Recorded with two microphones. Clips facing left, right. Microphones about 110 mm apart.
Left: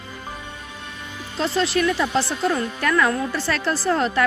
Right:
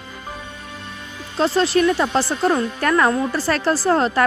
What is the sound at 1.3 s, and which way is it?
A woman's voice, 35° right (ahead or behind).